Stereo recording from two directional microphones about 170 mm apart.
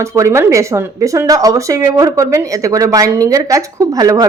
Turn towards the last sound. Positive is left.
turn(degrees=-20)  # may be behind; listen again after turning